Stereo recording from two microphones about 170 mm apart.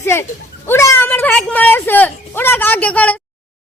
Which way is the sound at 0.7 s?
15° left (ahead or behind).